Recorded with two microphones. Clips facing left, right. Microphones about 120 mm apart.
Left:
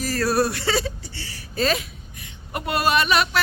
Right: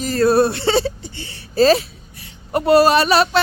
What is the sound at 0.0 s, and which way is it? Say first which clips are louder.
Speech: right 7 dB; 25° right (ahead or behind).